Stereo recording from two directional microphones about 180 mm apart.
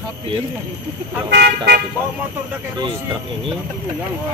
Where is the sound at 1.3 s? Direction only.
70° right (ahead or behind).